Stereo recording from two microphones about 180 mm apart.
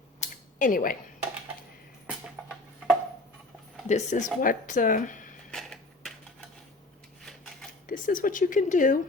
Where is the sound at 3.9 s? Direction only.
40° left (ahead or behind).